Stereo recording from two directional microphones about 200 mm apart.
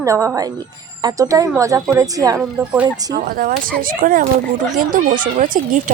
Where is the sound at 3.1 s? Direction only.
45° right (ahead or behind).